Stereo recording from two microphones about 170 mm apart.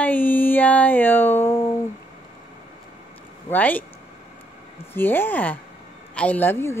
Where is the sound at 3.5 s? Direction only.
10° left (ahead or behind).